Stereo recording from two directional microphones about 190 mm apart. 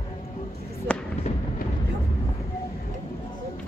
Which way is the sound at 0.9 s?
5° left (ahead or behind).